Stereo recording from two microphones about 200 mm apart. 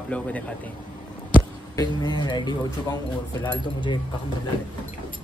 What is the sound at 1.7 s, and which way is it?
Speech, 20° left (ahead or behind).